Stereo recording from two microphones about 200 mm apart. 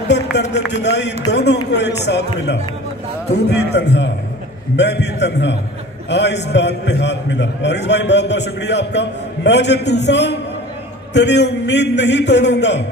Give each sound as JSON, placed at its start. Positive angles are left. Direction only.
{"t": 0.1, "sound": "a man's voice", "side_deg": 60}